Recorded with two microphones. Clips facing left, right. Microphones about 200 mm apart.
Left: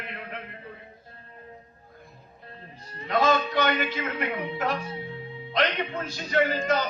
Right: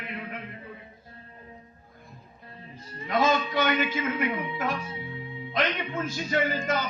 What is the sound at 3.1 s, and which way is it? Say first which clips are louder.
Music: left 1 dB; 50° left (ahead or behind).